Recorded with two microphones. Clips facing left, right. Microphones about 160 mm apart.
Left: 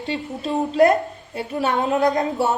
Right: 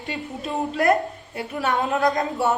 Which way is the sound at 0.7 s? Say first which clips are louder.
Left 4 dB; 25° left (ahead or behind).